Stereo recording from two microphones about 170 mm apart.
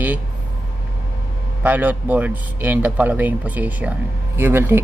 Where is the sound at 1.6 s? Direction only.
10° right (ahead or behind).